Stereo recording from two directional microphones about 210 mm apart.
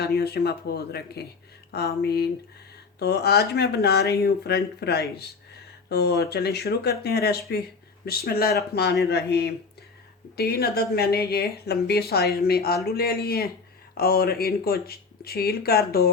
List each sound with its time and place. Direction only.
0.0 s speech: 50° left (ahead or behind)